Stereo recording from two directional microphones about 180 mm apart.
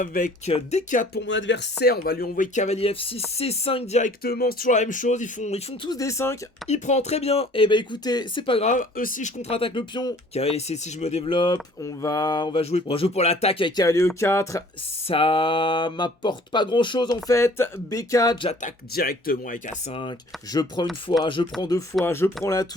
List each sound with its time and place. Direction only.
0.0 s speech: 50° left (ahead or behind)
1.1 s speech: 90° left; by 4.0 s 35° left (ahead or behind)
4.0 s speech: 60° left (ahead or behind)
4.7 s speech: 45° left (ahead or behind)
5.9 s speech: 15° left (ahead or behind)
6.7 s speech: 40° left (ahead or behind)
8.7 s speech: 50° left (ahead or behind); by 10.2 s 25° left (ahead or behind)
10.3 s speech: 35° left (ahead or behind)
12.7 s speech: 35° left (ahead or behind); by 14.6 s 15° left (ahead or behind)
15.0 s speech: 30° left (ahead or behind)
18.6 s speech: 55° left (ahead or behind)
19.9 s speech: 30° left (ahead or behind)